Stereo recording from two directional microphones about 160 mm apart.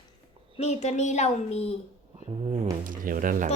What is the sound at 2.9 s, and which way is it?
Speech, 60° right (ahead or behind).